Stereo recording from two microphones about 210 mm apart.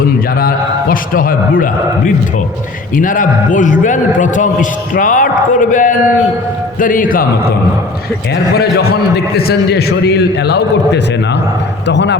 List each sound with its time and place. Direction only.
0.3 s a man's voice: 45° left (ahead or behind)
2.9 s a man's voice: 40° left (ahead or behind)
9.5 s a man's voice: 50° left (ahead or behind)